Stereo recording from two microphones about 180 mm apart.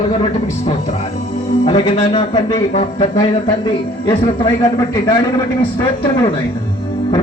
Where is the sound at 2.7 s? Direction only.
40° left (ahead or behind).